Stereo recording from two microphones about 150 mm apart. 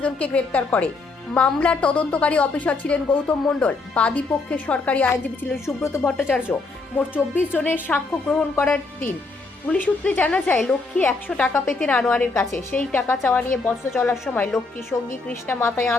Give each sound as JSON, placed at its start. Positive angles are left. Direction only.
{"t": 0.0, "sound": "speech", "side_deg": 10}
{"t": 6.1, "sound": "speech", "side_deg": 5}